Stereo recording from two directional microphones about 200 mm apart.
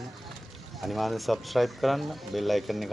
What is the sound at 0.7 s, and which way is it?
Speech, centre (ahead or behind).